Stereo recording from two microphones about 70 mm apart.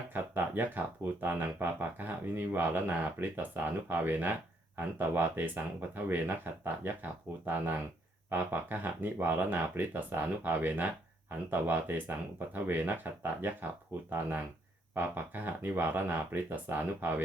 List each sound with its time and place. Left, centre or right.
0.1 s speech: right